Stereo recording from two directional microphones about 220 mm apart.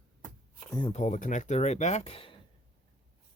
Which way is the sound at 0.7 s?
25° left (ahead or behind).